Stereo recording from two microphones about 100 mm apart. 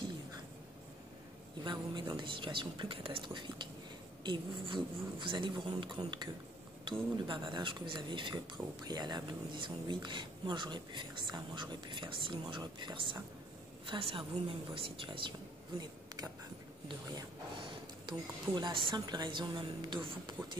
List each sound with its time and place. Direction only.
1.6 s speech: 50° right (ahead or behind)
13.8 s a woman's voice: 60° right (ahead or behind)
16.8 s speech: 45° right (ahead or behind)